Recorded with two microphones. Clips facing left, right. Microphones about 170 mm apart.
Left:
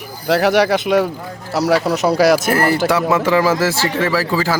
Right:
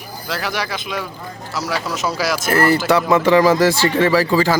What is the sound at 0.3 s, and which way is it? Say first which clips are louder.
Speech: left 11 dB; 65° left (ahead or behind).